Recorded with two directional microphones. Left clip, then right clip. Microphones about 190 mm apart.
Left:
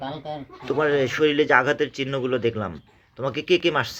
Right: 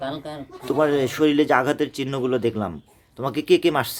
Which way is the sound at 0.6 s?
30° right (ahead or behind).